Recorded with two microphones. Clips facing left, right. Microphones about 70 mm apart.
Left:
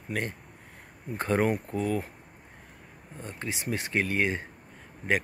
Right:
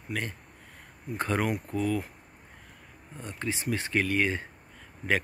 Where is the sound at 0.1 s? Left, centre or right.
Left.